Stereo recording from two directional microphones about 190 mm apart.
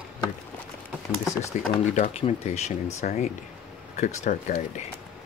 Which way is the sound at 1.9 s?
35° left (ahead or behind).